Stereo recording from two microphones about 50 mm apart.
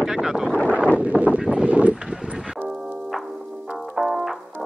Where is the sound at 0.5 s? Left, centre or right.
Left.